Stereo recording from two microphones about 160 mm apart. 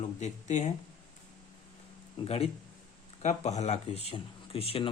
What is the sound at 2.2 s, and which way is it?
A man's voice, 40° left (ahead or behind).